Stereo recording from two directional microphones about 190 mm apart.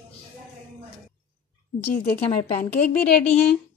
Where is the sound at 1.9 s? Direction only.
50° left (ahead or behind).